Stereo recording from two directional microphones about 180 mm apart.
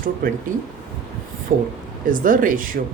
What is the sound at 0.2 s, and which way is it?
Speech, 50° right (ahead or behind).